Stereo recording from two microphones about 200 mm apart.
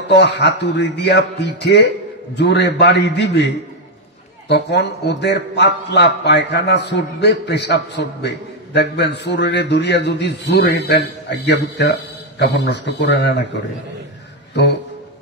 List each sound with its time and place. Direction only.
0.1 s a man's voice: 60° left (ahead or behind)